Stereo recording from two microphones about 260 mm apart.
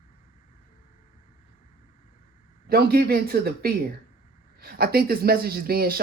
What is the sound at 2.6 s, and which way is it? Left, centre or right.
Speech, right.